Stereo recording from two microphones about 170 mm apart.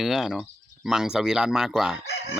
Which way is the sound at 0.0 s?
Centre (ahead or behind).